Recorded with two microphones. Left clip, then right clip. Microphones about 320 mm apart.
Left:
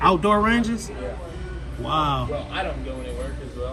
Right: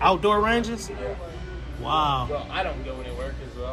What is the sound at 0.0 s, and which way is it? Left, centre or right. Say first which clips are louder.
Speech: left 2 dB; centre.